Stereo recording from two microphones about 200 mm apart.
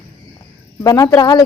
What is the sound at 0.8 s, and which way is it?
Speech, 15° left (ahead or behind).